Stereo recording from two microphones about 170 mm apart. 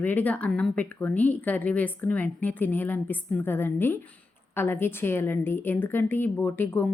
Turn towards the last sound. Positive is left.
turn(degrees=10)  # may be behind; listen again after turning